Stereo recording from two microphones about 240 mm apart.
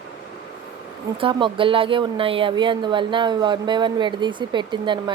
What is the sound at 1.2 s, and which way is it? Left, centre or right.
A woman's voice, right.